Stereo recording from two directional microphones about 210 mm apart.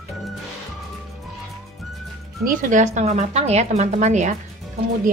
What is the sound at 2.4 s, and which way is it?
A woman's voice, 40° right (ahead or behind).